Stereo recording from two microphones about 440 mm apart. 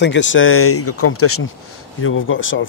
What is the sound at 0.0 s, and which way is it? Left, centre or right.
Speech, left.